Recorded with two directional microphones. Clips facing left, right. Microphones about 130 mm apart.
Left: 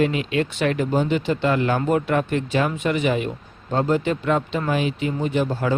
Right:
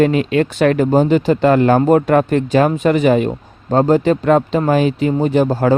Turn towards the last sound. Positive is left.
turn(degrees=-40)  # may be behind; listen again after turning